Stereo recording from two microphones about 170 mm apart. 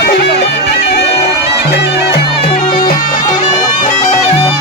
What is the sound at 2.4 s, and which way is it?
Music, 35° left (ahead or behind).